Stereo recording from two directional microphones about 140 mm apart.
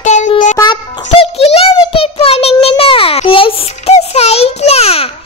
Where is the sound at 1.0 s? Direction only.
45° left (ahead or behind).